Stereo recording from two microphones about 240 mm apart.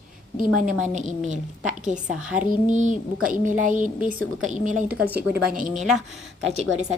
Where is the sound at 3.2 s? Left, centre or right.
Right.